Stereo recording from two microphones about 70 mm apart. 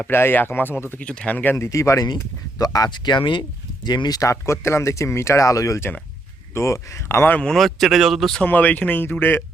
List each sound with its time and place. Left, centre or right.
0.1 s speech: left
0.9 s speech: centre
1.5 s speech: left
2.6 s speech: left
4.2 s speech: left
7.3 s speech: centre
7.5 s speech: centre
8.4 s speech: left